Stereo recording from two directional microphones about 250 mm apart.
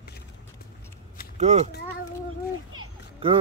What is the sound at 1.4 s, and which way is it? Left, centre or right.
Speech, right.